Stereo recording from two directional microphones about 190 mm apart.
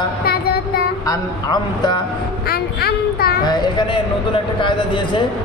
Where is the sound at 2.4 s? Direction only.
55° left (ahead or behind).